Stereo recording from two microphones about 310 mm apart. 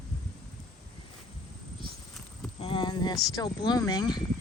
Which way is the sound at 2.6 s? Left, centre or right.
Centre.